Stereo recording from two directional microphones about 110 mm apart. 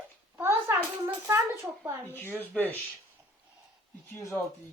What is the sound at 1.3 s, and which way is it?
Speech, 20° right (ahead or behind).